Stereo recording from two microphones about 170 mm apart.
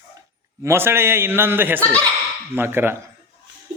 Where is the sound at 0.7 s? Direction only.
15° right (ahead or behind).